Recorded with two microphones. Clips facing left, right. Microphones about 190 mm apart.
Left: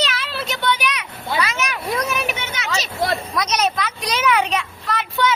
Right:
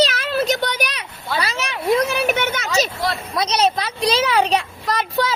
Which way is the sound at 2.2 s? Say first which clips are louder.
Right 7 dB; 55° right (ahead or behind).